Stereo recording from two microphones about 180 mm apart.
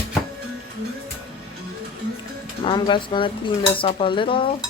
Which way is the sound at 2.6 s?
25° left (ahead or behind).